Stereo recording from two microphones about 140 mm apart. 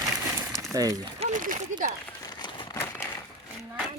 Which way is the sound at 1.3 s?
70° right (ahead or behind).